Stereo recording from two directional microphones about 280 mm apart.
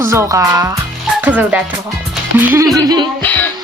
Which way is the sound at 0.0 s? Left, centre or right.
Centre.